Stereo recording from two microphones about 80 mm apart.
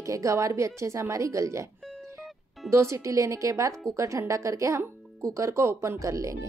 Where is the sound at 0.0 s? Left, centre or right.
Right.